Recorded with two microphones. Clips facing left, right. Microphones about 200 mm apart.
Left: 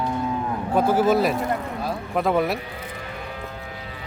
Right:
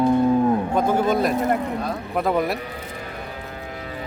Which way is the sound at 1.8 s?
Centre (ahead or behind).